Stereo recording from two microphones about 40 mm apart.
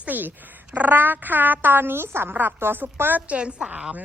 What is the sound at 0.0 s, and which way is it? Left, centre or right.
A woman's voice, right.